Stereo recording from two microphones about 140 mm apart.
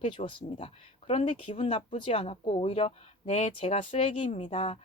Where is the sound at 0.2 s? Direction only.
40° left (ahead or behind).